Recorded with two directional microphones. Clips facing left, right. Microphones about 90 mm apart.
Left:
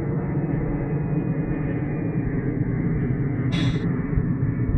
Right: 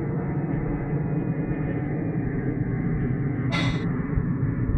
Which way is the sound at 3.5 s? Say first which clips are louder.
Left 2 dB; 85° right.